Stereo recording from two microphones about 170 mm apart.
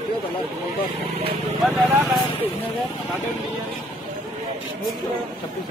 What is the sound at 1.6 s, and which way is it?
Speech, centre (ahead or behind).